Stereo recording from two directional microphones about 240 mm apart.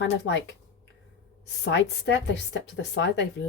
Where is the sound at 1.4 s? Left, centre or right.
Left.